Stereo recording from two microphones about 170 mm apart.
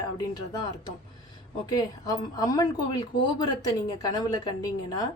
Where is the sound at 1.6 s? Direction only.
25° left (ahead or behind).